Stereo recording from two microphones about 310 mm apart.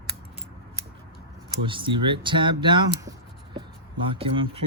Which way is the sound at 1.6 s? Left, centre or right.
Centre.